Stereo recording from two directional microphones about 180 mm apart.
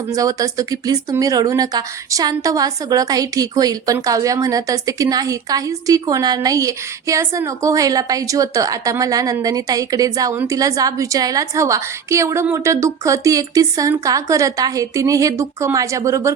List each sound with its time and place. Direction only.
0.1 s speech: 20° right (ahead or behind)